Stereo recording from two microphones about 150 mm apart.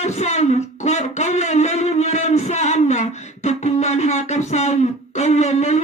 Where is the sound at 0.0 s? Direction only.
50° left (ahead or behind).